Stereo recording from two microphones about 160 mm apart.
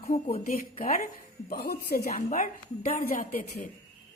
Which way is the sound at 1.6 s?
70° left (ahead or behind).